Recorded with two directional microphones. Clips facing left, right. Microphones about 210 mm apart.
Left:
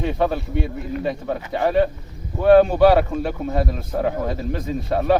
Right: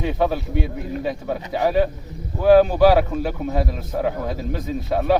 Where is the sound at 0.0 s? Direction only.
Centre (ahead or behind).